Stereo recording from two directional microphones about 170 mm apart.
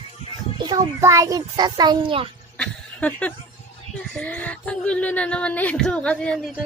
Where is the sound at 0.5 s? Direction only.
25° right (ahead or behind).